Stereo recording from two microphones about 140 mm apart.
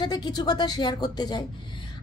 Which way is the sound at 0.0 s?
30° left (ahead or behind).